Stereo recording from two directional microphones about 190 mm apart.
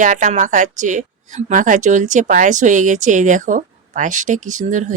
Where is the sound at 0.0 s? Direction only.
40° right (ahead or behind).